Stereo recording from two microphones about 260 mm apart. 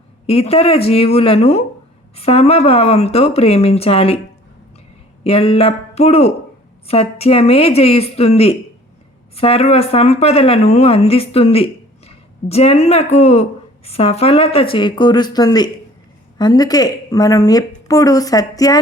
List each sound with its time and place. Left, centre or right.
0.3 s speech: left
5.2 s a woman's voice: left